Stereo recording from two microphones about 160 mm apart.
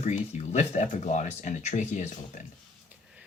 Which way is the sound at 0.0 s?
45° left (ahead or behind).